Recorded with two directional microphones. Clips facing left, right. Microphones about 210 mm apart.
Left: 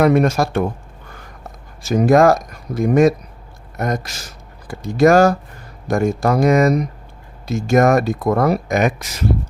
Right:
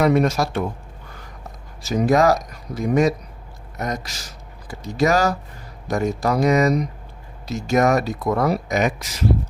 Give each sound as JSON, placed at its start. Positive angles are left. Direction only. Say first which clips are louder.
{"t": 0.0, "sound": "speech", "louder": "left 3 dB", "side_deg": 55}
{"t": 1.8, "sound": "speech", "louder": "left 5 dB", "side_deg": 50}